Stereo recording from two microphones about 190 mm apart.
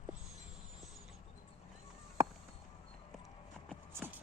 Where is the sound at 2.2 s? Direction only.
15° right (ahead or behind).